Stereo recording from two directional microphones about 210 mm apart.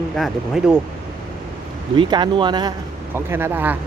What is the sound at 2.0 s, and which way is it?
Speech, 20° right (ahead or behind).